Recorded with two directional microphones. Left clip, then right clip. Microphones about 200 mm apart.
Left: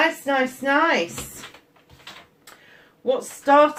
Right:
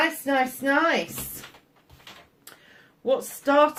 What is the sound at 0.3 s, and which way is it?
Speech, 50° right (ahead or behind).